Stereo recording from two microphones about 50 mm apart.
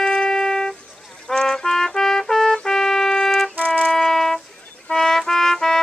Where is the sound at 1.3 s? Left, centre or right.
Centre.